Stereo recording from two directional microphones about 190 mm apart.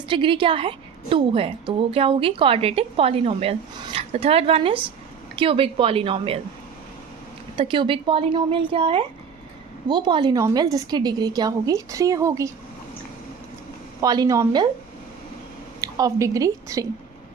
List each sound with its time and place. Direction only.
0.1 s a woman's voice: 25° right (ahead or behind)
7.5 s a woman's voice: 25° right (ahead or behind)
14.0 s a woman's voice: 20° right (ahead or behind)
15.8 s a woman's voice: 20° right (ahead or behind)